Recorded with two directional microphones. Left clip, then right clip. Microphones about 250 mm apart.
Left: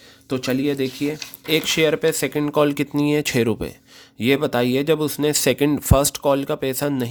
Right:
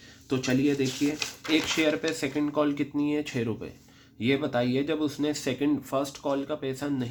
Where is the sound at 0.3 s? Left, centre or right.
Left.